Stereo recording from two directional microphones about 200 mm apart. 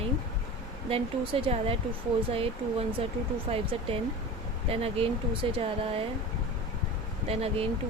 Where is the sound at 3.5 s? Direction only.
30° right (ahead or behind).